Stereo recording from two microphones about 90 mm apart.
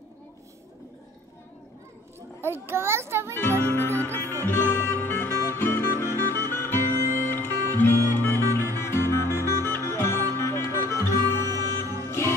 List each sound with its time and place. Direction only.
2.4 s a child's voice: 25° right (ahead or behind)
4.0 s music: 20° left (ahead or behind)